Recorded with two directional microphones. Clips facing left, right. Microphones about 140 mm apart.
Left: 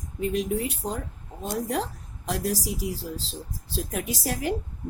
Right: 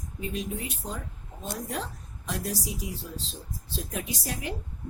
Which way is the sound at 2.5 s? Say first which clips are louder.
Left 5 dB; 85° left.